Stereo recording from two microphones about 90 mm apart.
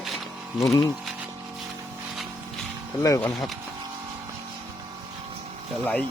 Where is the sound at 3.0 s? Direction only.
35° left (ahead or behind).